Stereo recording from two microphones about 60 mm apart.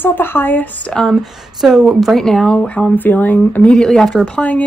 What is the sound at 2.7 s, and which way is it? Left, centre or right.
Speech, left.